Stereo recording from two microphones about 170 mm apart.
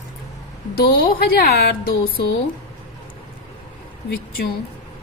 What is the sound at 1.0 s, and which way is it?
A woman's voice, 65° left (ahead or behind).